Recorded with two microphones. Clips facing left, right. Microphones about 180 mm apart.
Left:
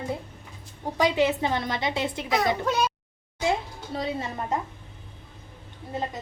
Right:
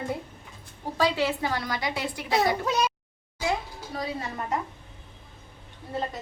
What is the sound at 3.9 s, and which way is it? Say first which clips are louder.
Speech: left 3 dB; 25° left (ahead or behind).